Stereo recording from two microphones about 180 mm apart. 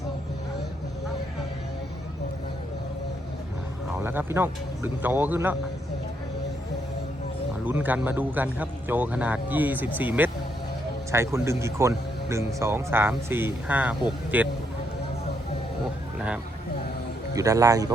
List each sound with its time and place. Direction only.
3.9 s speech: 10° right (ahead or behind)
7.6 s speech: 10° right (ahead or behind)
16.1 s vehicle: 5° right (ahead or behind)
17.3 s speech: 20° right (ahead or behind)